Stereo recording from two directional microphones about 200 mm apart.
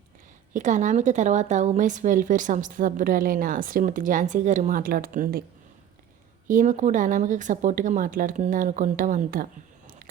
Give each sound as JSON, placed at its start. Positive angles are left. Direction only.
{"t": 0.5, "sound": "a woman's voice", "side_deg": -40}
{"t": 6.5, "sound": "a woman's voice", "side_deg": -40}